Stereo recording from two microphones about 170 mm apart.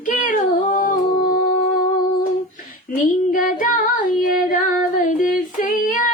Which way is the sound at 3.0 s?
50° left (ahead or behind).